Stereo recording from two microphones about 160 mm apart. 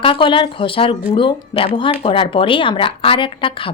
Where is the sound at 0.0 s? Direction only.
30° left (ahead or behind).